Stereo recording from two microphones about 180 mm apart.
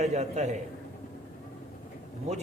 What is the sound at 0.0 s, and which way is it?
Speech, 40° right (ahead or behind).